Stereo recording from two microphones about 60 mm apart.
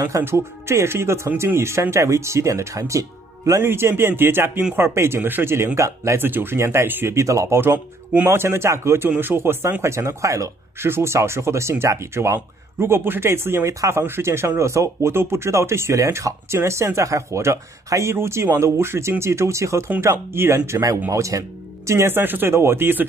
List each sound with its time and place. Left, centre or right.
0.2 s speech: right
3.6 s speech: right
5.8 s speech: right
6.1 s speech: right
6.9 s speech: right
7.2 s speech: right
10.9 s speech: right
18.1 s speech: right
21.1 s speech: right
22.1 s speech: right